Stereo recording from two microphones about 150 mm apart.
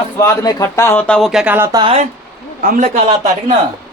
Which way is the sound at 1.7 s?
30° right (ahead or behind).